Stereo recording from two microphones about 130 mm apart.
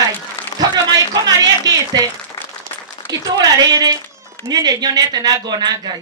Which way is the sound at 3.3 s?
30° right (ahead or behind).